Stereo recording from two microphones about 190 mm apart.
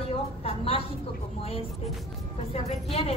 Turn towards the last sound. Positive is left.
turn(degrees=30)  # may be behind; listen again after turning